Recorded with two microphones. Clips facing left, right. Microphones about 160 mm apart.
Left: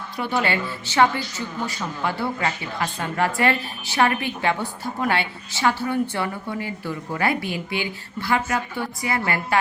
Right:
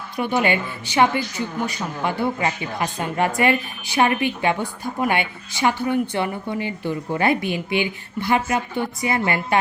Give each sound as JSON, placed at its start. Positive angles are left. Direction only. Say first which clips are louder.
{"t": 0.2, "sound": "a woman's voice", "louder": "right 3 dB", "side_deg": -15}